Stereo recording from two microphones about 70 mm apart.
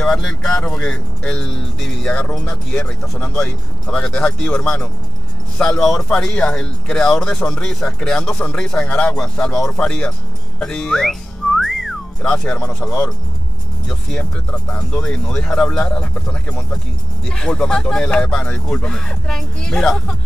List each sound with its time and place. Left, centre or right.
0.0 s speech: centre
2.1 s speech: left
10.6 s whistling: centre
12.2 s speech: centre